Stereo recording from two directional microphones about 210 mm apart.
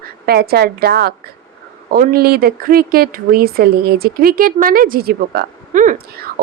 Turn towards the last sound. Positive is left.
turn(degrees=-45)  # may be behind; listen again after turning